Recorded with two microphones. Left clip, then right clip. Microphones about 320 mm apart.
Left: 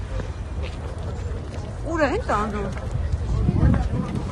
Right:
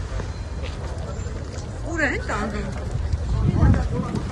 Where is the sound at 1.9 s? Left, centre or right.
Centre.